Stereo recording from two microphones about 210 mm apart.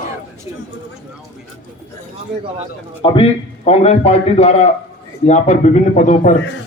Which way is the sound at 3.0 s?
25° left (ahead or behind).